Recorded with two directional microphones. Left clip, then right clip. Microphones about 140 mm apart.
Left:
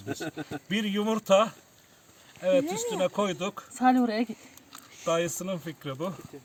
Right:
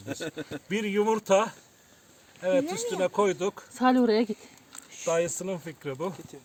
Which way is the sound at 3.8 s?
25° right (ahead or behind).